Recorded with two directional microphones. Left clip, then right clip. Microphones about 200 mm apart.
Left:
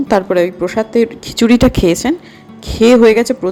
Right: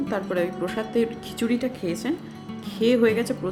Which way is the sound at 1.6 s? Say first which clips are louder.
Left 17 dB; 45° left (ahead or behind).